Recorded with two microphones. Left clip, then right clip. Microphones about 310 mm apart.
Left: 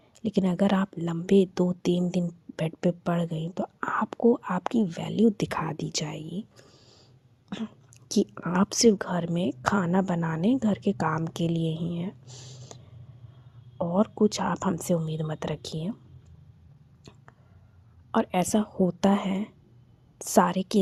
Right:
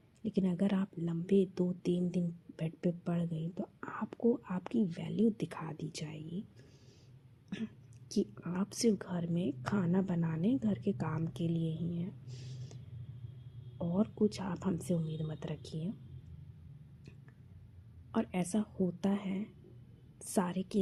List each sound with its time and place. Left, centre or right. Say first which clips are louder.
0.2 s speech: left 9 dB; left
18.1 s speech: left 11 dB; left